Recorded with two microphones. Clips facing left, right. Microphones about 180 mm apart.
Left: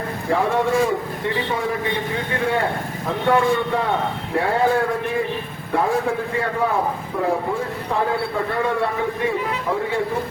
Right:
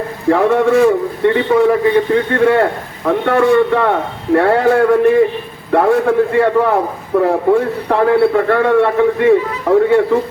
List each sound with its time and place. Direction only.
0.3 s a man's voice: 65° right (ahead or behind)